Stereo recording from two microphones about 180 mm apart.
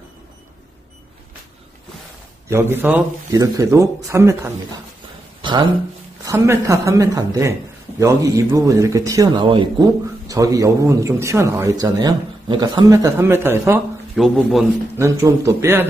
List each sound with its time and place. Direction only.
2.5 s a man's voice: 10° right (ahead or behind)
5.4 s a sound: 25° right (ahead or behind)
6.2 s a man's voice: 15° right (ahead or behind)
14.1 s a man's voice: centre (ahead or behind)
15.0 s a man's voice: 15° right (ahead or behind)